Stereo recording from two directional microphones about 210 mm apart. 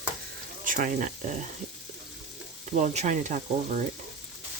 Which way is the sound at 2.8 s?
35° right (ahead or behind).